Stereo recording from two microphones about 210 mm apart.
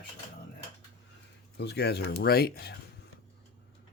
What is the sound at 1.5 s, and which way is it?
Speech, 50° left (ahead or behind).